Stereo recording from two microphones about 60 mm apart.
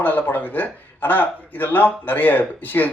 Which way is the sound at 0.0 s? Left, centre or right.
Left.